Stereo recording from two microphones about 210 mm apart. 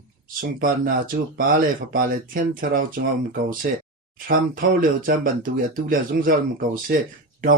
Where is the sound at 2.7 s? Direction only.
40° right (ahead or behind).